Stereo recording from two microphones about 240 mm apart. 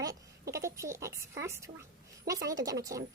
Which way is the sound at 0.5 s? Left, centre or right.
Centre.